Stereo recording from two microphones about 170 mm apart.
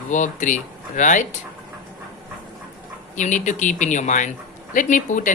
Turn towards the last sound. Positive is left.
turn(degrees=50)  # may be behind; listen again after turning